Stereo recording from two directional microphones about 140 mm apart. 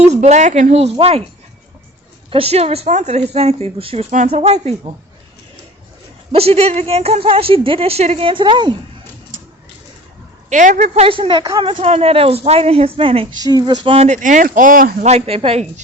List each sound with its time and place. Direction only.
0.0 s speech: 55° right (ahead or behind)
2.3 s speech: 45° right (ahead or behind)
4.1 s speech: 55° right (ahead or behind)
6.3 s speech: 45° right (ahead or behind)
10.5 s speech: 65° right (ahead or behind); by 13.2 s 40° right (ahead or behind)
13.4 s speech: 30° right (ahead or behind)
13.8 s speech: 45° right (ahead or behind); by 14.9 s 75° right (ahead or behind)
15.0 s speech: 45° right (ahead or behind)